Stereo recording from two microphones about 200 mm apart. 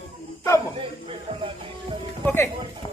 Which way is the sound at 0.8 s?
25° right (ahead or behind).